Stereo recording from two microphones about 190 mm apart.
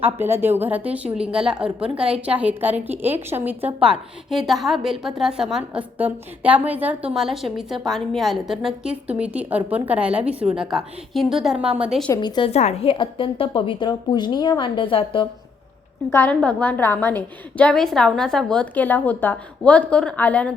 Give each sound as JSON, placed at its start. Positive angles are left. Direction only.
{"t": 0.0, "sound": "a woman's voice", "side_deg": -10}
{"t": 12.0, "sound": "a woman's voice", "side_deg": 20}
{"t": 16.1, "sound": "a woman's voice", "side_deg": 10}